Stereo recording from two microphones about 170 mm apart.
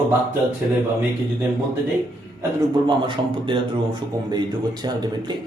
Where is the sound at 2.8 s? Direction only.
30° right (ahead or behind).